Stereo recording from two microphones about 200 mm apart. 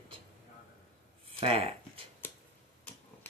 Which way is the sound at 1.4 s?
30° right (ahead or behind).